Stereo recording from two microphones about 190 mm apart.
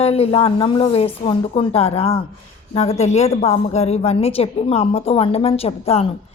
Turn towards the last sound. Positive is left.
turn(degrees=30)  # may be behind; listen again after turning